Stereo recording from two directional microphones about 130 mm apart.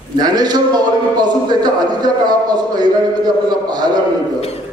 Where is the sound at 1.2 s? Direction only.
30° right (ahead or behind).